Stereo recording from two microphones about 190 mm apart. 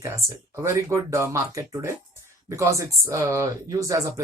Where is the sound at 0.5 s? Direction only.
15° right (ahead or behind).